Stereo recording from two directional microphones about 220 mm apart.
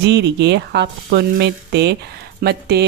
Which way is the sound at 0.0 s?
50° right (ahead or behind).